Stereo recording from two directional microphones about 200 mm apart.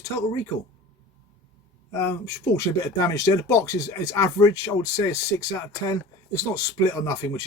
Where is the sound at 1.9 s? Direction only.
15° left (ahead or behind).